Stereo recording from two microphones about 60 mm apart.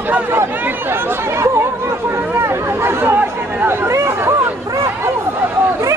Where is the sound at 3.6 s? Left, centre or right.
Right.